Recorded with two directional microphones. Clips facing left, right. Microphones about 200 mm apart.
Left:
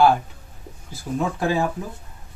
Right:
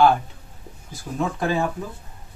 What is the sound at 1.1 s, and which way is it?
Speech, 15° left (ahead or behind).